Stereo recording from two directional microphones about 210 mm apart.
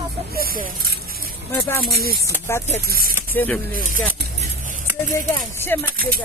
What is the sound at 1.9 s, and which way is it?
Speech, 45° left (ahead or behind).